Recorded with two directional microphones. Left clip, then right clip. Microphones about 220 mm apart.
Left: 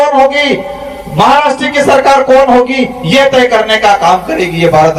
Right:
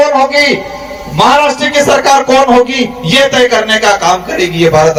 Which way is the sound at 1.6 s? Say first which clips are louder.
Left 1 dB; 45° right (ahead or behind).